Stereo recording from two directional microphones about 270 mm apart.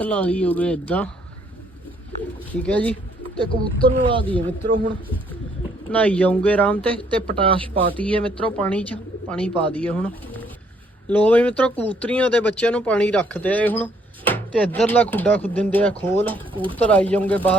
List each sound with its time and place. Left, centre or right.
0.0 s speech: centre
2.6 s speech: centre
3.8 s speech: centre
5.9 s speech: centre
7.3 s speech: centre
7.9 s speech: centre
16.5 s speech: centre
16.7 s speech: centre